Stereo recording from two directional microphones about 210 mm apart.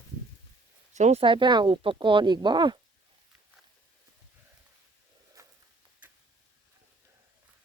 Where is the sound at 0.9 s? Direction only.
30° right (ahead or behind).